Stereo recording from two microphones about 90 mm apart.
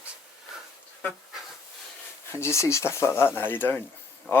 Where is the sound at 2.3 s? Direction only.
30° left (ahead or behind).